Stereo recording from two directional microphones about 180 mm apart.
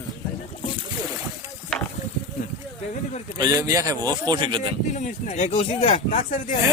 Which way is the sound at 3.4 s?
20° right (ahead or behind).